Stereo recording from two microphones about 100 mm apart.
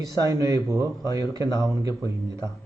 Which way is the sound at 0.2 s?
35° right (ahead or behind).